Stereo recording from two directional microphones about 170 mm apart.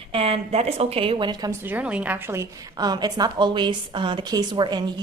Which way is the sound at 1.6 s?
10° right (ahead or behind).